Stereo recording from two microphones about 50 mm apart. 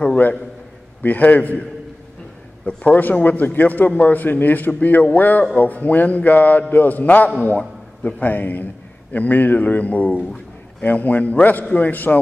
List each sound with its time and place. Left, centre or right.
1.0 s a man's voice: left